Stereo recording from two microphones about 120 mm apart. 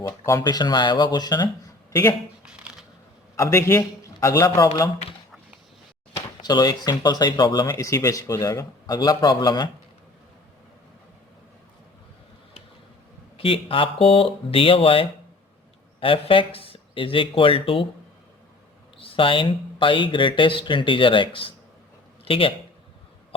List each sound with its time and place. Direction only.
0.3 s speech: 30° left (ahead or behind)
2.4 s a sound: 10° right (ahead or behind)
3.3 s a man's voice: 25° left (ahead or behind)
6.4 s speech: 35° left (ahead or behind)
13.3 s speech: 50° left (ahead or behind)
18.9 s a man's voice: 50° left (ahead or behind)